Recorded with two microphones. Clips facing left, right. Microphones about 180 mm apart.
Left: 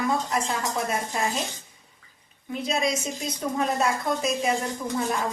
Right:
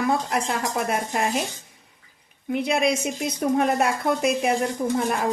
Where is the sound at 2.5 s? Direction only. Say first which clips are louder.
Right 4 dB; 65° right (ahead or behind).